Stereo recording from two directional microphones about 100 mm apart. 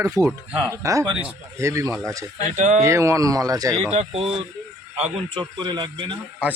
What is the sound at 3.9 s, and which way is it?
Speech, 85° right.